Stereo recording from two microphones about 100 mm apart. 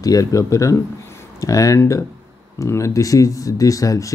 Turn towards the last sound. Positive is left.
turn(degrees=35)  # may be behind; listen again after turning